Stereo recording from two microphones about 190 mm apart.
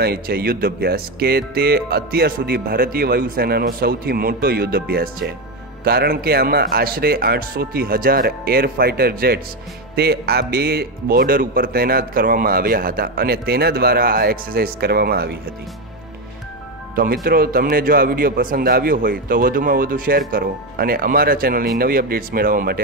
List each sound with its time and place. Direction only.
0.0 s speech: 55° right (ahead or behind)
16.9 s speech: 50° right (ahead or behind)